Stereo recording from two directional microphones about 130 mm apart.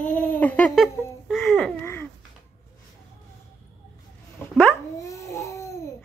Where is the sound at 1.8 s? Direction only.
15° left (ahead or behind).